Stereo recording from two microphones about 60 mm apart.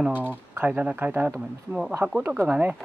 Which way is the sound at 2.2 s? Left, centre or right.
Right.